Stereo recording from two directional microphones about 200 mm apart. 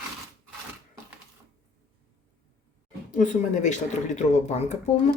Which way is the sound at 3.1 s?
40° left (ahead or behind).